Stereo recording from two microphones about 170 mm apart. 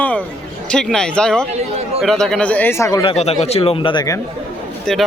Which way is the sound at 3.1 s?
40° left (ahead or behind).